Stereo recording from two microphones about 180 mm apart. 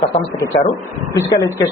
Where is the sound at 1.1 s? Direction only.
20° left (ahead or behind).